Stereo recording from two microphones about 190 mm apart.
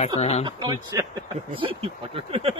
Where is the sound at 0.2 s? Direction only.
35° left (ahead or behind).